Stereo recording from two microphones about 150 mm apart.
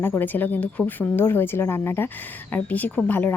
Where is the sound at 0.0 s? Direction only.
10° left (ahead or behind).